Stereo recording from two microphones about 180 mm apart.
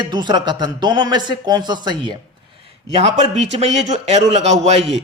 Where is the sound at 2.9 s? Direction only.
35° right (ahead or behind).